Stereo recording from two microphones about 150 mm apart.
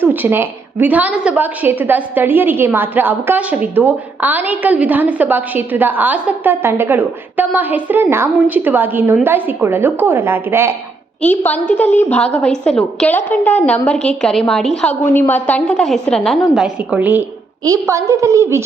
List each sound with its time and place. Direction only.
0.0 s a woman's voice: 15° right (ahead or behind)
11.2 s a woman's voice: 10° left (ahead or behind); by 18.6 s 20° right (ahead or behind)